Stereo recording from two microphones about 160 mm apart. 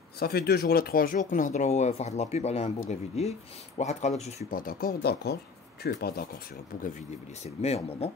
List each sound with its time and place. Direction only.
0.2 s speech: 75° left (ahead or behind); by 4.6 s 45° left (ahead or behind)
4.6 s speech: 65° left (ahead or behind)
7.4 s speech: 40° left (ahead or behind)